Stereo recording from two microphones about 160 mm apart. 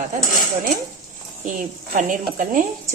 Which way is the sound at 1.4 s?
55° right (ahead or behind).